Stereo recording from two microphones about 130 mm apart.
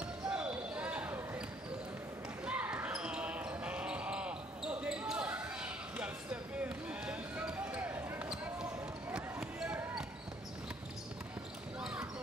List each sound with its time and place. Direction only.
0.3 s basketball bounce: 10° right (ahead or behind)
2.4 s basketball bounce: 10° right (ahead or behind)
11.8 s basketball bounce: 5° right (ahead or behind)